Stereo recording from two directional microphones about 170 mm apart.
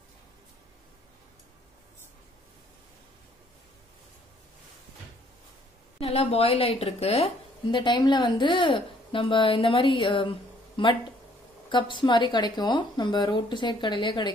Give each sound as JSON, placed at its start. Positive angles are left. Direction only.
{"t": 5.9, "sound": "a woman's voice", "side_deg": 35}